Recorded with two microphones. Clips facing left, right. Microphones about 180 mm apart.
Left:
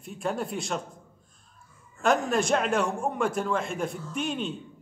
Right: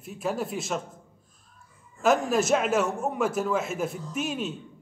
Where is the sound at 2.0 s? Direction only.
5° right (ahead or behind).